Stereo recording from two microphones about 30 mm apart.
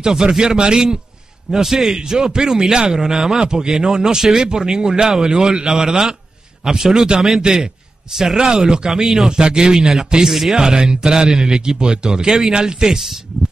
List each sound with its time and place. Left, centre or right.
0.0 s speech: right
1.5 s speech: centre
7.4 s speech: right
9.0 s speech: centre
9.3 s speech: right
12.3 s speech: centre
12.5 s speech: right
12.8 s speech: centre